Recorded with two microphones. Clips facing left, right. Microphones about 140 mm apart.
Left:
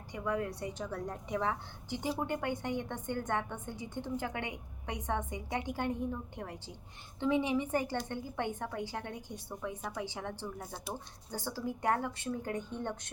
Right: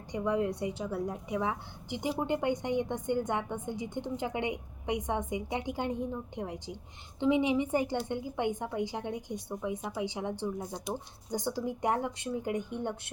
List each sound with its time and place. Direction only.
0.1 s a woman's voice: 20° right (ahead or behind)
0.8 s a woman's voice: 10° right (ahead or behind)